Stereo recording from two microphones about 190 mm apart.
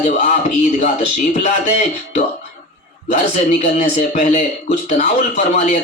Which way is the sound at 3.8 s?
40° left (ahead or behind).